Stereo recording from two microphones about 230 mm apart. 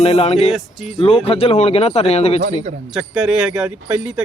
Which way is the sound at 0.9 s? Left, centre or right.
Left.